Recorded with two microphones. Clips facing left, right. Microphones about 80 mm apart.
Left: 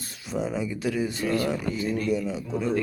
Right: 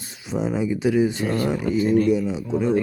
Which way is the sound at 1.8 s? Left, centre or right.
Right.